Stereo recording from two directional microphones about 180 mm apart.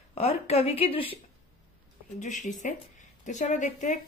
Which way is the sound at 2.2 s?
45° left (ahead or behind).